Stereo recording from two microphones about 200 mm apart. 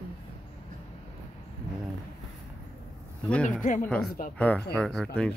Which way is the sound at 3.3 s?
5° left (ahead or behind).